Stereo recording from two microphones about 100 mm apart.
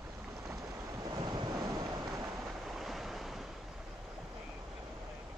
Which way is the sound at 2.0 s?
40° right (ahead or behind).